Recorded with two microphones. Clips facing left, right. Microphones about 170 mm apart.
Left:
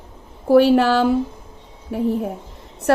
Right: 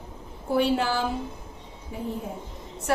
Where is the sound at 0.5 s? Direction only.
65° left (ahead or behind).